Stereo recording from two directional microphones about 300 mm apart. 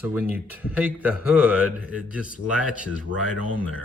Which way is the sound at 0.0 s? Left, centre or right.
Centre.